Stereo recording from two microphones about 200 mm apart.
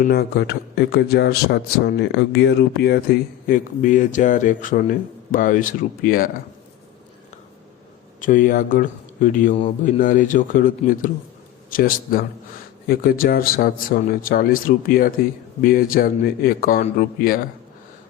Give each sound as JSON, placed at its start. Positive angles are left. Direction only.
{"t": 0.0, "sound": "speech", "side_deg": 55}
{"t": 8.2, "sound": "a man's voice", "side_deg": 40}